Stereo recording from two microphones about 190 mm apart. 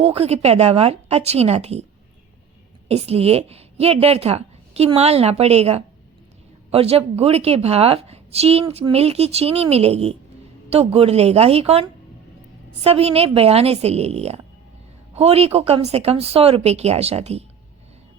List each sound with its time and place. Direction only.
0.0 s a woman's voice: 30° right (ahead or behind)
2.9 s a woman's voice: 35° right (ahead or behind)